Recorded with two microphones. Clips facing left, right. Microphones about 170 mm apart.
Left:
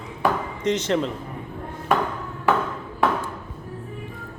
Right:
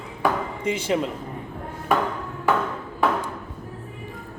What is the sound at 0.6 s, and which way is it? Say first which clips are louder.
Speech: left 2 dB; 10° right (ahead or behind).